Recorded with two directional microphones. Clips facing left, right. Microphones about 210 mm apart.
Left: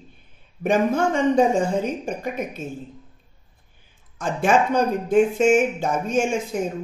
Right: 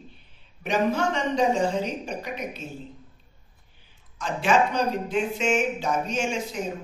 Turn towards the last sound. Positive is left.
turn(degrees=50)  # may be behind; listen again after turning